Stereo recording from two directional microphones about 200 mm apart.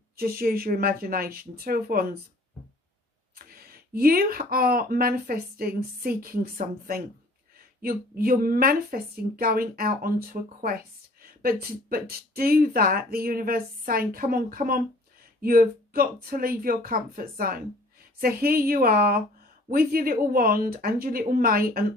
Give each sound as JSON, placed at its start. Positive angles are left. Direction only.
{"t": 0.2, "sound": "speech", "side_deg": -50}
{"t": 3.3, "sound": "speech", "side_deg": -50}
{"t": 7.8, "sound": "speech", "side_deg": -50}